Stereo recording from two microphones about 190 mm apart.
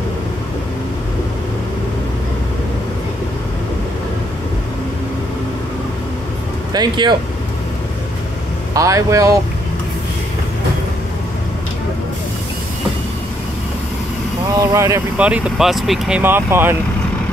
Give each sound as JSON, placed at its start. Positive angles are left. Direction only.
{"t": 6.7, "sound": "speech", "side_deg": -20}
{"t": 8.7, "sound": "speech", "side_deg": -15}
{"t": 14.5, "sound": "speech", "side_deg": -20}